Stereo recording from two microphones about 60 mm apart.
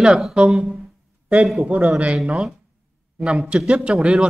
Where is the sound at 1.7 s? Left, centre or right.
Right.